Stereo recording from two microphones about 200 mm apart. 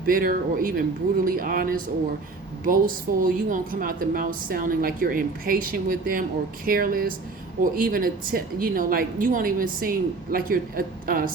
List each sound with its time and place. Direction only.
0.0 s a woman's voice: 45° right (ahead or behind)